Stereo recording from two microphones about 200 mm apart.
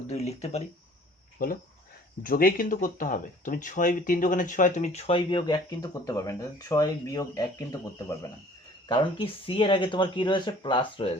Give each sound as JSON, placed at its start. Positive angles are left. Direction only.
{"t": 0.1, "sound": "speech", "side_deg": 30}
{"t": 1.4, "sound": "speech", "side_deg": 45}